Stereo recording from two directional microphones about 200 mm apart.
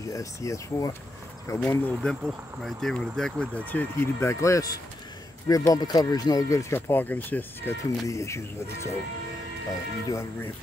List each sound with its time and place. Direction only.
0.1 s speech: 15° left (ahead or behind)
10.0 s speech: 15° left (ahead or behind)